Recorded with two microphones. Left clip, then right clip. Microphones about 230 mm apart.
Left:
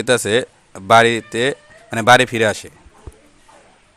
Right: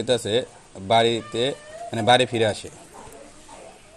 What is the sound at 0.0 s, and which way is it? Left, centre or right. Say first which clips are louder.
Speech: left 6 dB; left.